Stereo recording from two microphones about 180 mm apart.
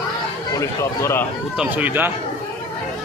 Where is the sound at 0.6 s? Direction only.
15° left (ahead or behind).